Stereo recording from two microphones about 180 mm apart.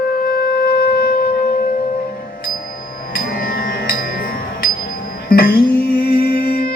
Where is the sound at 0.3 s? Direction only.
60° left (ahead or behind).